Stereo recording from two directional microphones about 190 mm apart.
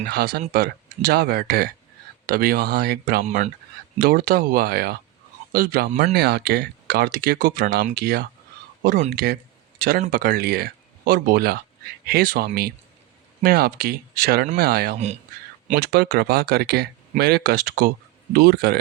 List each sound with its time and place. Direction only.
0.1 s speech: 55° right (ahead or behind)
3.2 s speech: 40° right (ahead or behind)
3.9 s a man's voice: 50° right (ahead or behind)
14.9 s speech: 35° right (ahead or behind)
15.6 s speech: 55° right (ahead or behind)